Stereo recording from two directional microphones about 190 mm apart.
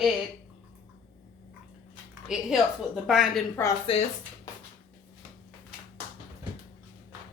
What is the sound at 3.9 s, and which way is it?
Speech, 30° left (ahead or behind).